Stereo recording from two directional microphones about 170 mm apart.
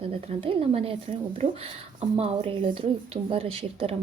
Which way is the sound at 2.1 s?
35° right (ahead or behind).